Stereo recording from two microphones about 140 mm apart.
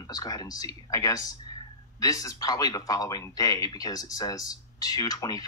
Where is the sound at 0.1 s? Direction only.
30° left (ahead or behind).